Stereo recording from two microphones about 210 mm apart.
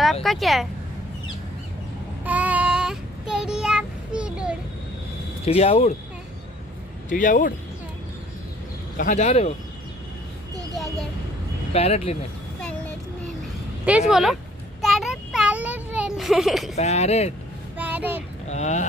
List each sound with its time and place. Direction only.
0.0 s speech: centre (ahead or behind)
2.2 s child singing: 5° right (ahead or behind)
5.4 s speech: 30° left (ahead or behind)
7.1 s speech: 40° left (ahead or behind)
8.9 s speech: 35° left (ahead or behind)
11.7 s speech: 30° left (ahead or behind)
13.8 s speech: 5° right (ahead or behind)
14.8 s a sound: centre (ahead or behind)
16.7 s speech: 30° left (ahead or behind)
17.7 s a sound: 10° right (ahead or behind)
18.5 s speech: 35° left (ahead or behind)